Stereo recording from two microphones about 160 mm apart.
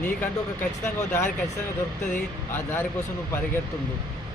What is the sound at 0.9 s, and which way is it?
Speech, 15° left (ahead or behind).